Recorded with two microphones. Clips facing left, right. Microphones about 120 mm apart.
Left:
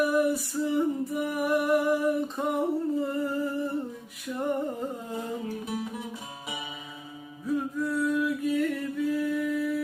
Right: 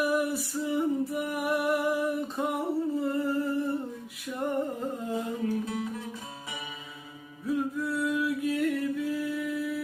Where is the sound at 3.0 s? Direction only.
Centre (ahead or behind).